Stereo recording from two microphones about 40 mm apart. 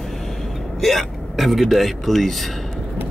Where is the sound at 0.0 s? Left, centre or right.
Centre.